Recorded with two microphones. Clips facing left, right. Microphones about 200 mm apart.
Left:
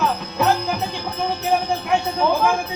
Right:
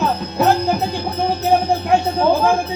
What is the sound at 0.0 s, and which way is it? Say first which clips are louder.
Music: right 3 dB; 35° right (ahead or behind).